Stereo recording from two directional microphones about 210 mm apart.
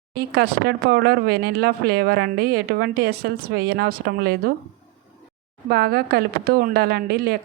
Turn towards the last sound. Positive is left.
turn(degrees=-45)  # may be behind; listen again after turning